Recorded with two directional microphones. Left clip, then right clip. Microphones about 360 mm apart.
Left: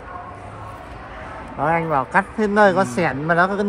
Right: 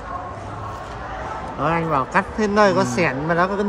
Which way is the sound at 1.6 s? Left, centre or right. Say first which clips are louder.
Left 1 dB; left.